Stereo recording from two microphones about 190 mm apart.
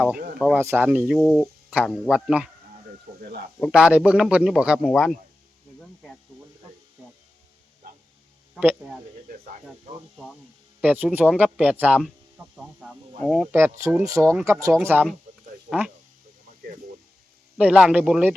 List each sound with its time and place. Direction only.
0.3 s a man's voice: centre (ahead or behind)
3.1 s a sound: 50° right (ahead or behind)
3.6 s a man's voice: 5° right (ahead or behind)
8.5 s a man's voice: centre (ahead or behind)
9.9 s speech: 35° right (ahead or behind)
10.8 s speech: 10° right (ahead or behind)
17.6 s a man's voice: 5° right (ahead or behind)